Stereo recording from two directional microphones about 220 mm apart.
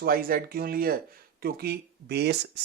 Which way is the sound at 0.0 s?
40° right (ahead or behind).